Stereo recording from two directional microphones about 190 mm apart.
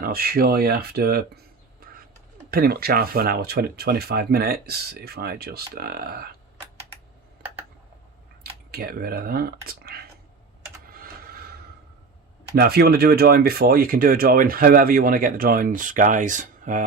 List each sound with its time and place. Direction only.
0.0 s speech: 50° right (ahead or behind)
1.8 s a sound: 50° right (ahead or behind)
2.5 s speech: 55° right (ahead or behind)
8.7 s speech: 50° right (ahead or behind)
12.5 s speech: 55° right (ahead or behind)